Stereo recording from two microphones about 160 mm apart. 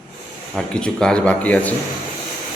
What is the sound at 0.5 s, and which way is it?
Speech, 5° left (ahead or behind).